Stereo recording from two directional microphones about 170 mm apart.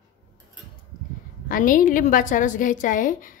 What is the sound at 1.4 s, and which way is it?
A woman's voice, 55° left (ahead or behind).